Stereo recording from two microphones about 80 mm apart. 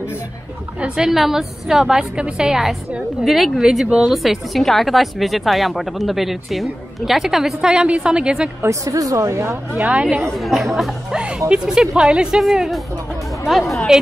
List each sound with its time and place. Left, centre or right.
0.7 s a woman's voice: centre
8.6 s a woman's voice: right
9.8 s speech: centre
10.3 s a woman's voice: centre
11.1 s a woman's voice: centre